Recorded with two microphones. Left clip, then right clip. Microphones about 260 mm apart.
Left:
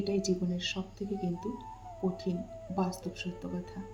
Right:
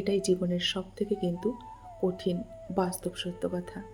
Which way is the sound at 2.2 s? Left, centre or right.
Right.